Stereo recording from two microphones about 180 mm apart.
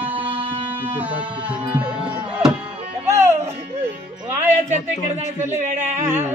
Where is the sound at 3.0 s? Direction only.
15° right (ahead or behind).